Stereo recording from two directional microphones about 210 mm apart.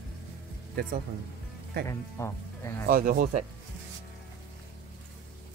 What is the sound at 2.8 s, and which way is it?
Speech, 45° right (ahead or behind).